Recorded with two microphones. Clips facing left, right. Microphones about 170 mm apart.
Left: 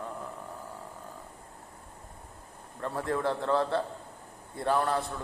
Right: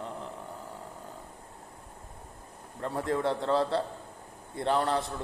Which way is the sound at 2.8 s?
20° right (ahead or behind).